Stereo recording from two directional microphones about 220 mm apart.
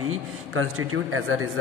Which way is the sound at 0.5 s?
70° right (ahead or behind).